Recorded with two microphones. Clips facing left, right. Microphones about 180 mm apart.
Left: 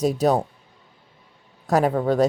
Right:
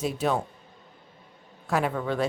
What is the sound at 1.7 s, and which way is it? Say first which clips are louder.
Speech: left 7 dB; 40° left (ahead or behind).